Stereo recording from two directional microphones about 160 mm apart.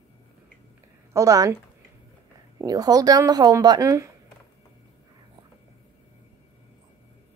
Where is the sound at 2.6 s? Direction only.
25° right (ahead or behind).